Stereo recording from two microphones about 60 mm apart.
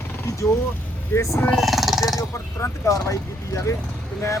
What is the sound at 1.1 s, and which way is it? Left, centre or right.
Speech, left.